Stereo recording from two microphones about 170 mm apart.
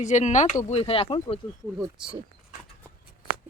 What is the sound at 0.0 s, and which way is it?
Speech, 45° left (ahead or behind).